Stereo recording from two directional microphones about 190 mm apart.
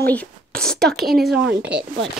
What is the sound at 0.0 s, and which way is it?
Speech, 10° left (ahead or behind).